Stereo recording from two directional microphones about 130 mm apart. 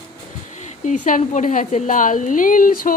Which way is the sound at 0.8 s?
75° left (ahead or behind).